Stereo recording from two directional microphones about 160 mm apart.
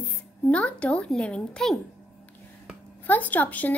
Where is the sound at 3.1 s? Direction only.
10° left (ahead or behind).